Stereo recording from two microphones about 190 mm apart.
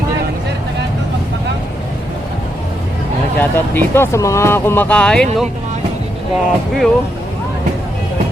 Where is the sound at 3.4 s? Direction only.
10° left (ahead or behind).